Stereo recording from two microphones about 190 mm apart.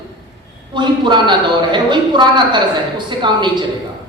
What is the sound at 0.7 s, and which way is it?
A woman's voice, 25° right (ahead or behind).